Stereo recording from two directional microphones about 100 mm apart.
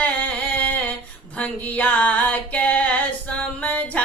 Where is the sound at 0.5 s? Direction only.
15° left (ahead or behind).